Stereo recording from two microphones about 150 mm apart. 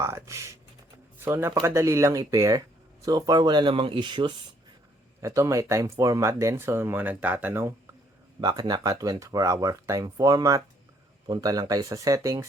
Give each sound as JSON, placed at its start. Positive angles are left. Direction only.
{"t": 0.0, "sound": "computer keyboard", "side_deg": -20}
{"t": 1.2, "sound": "speech", "side_deg": -15}
{"t": 5.2, "sound": "speech", "side_deg": -20}
{"t": 8.4, "sound": "speech", "side_deg": -30}